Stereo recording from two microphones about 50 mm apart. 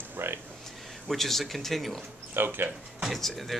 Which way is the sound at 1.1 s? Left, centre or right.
Centre.